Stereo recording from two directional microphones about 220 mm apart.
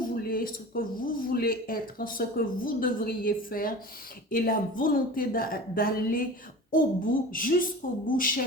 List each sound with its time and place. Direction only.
0.0 s speech: 40° left (ahead or behind)